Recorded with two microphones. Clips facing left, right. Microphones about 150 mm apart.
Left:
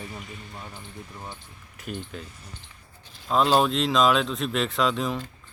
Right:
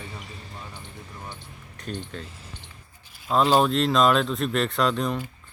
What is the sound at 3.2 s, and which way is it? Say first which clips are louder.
A man's voice: right 1 dB; centre (ahead or behind).